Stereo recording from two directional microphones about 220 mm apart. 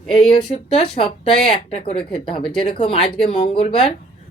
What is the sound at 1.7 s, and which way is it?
Speech, 25° left (ahead or behind).